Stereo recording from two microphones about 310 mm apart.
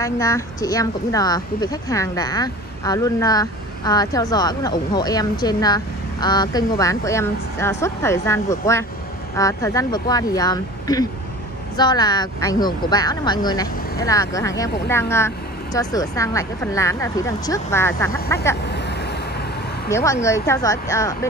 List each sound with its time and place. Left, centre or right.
0.0 s speech: centre
18.7 s vehicle: left
19.9 s speech: centre